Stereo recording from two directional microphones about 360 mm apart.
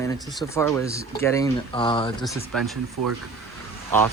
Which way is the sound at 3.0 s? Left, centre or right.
Right.